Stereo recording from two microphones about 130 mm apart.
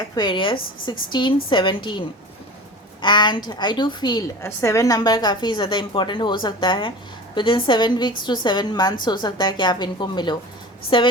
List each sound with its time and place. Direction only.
0.2 s a woman's voice: 40° left (ahead or behind)
4.4 s a woman's voice: 20° left (ahead or behind); by 11.1 s 40° left (ahead or behind)